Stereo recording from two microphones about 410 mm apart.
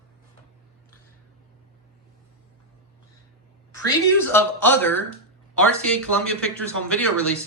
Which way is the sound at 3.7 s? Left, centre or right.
Centre.